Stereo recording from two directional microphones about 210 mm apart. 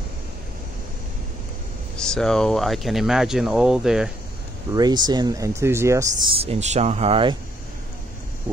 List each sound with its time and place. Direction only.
2.0 s speech: 5° left (ahead or behind)
4.7 s speech: 20° right (ahead or behind)
6.3 s speech: 30° right (ahead or behind)